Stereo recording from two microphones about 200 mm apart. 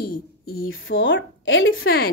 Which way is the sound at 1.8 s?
50° left (ahead or behind).